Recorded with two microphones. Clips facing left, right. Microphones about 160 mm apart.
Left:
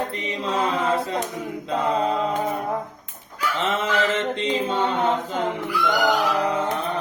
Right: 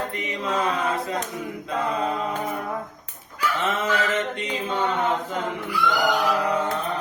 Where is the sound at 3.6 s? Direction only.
30° left (ahead or behind).